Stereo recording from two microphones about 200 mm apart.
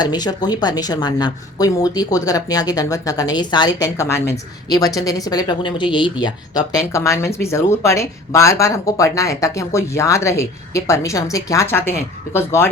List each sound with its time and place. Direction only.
0.0 s a woman's voice: 20° left (ahead or behind)